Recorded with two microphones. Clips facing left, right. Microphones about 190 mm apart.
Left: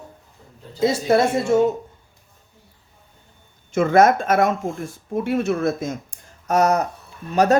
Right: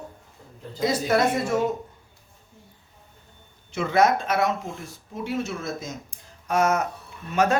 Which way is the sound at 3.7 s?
50° left (ahead or behind).